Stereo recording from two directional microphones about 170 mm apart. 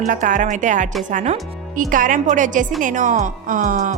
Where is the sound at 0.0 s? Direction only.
50° right (ahead or behind).